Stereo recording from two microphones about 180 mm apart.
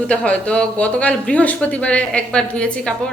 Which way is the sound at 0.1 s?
5° left (ahead or behind).